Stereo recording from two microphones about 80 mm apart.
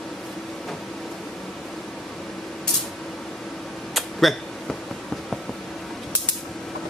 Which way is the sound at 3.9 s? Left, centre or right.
Centre.